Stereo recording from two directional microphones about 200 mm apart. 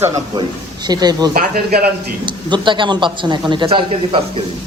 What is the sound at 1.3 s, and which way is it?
Speech, 45° right (ahead or behind).